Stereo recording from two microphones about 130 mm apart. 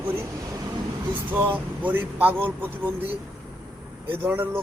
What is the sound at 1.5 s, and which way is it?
Speech, 15° right (ahead or behind).